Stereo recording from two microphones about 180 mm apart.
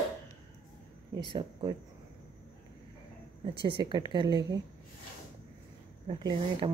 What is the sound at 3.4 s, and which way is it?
Speech, 30° right (ahead or behind).